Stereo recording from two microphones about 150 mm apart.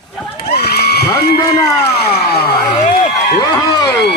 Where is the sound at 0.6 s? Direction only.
90° left.